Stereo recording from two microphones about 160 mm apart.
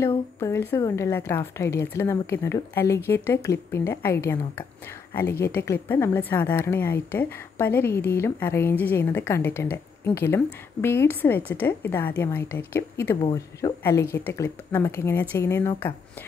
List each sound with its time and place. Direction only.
0.4 s a woman's voice: 15° left (ahead or behind)